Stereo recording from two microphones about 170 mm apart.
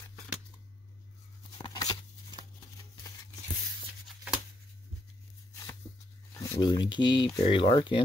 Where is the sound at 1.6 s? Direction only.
25° left (ahead or behind).